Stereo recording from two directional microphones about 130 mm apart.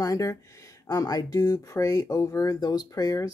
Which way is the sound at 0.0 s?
30° left (ahead or behind).